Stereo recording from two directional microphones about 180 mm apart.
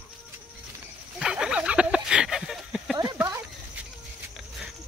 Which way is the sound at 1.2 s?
5° right (ahead or behind).